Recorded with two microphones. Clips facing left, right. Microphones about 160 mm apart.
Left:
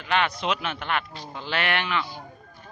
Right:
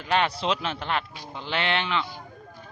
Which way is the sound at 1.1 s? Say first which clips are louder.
Even; 20° right (ahead or behind).